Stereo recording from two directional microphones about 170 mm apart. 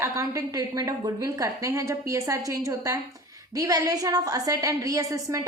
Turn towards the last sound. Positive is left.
turn(degrees=-20)  # may be behind; listen again after turning